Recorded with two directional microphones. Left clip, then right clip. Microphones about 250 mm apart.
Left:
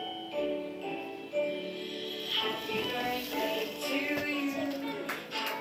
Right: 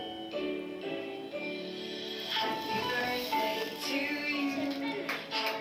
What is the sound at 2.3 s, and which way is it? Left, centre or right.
Music, right.